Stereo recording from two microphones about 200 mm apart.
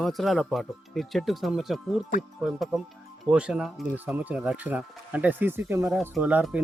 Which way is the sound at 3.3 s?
5° right (ahead or behind).